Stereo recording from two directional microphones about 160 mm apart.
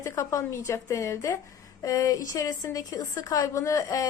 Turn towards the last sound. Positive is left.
turn(degrees=20)  # may be behind; listen again after turning